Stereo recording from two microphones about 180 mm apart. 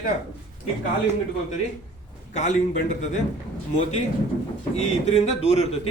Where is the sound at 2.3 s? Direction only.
40° left (ahead or behind).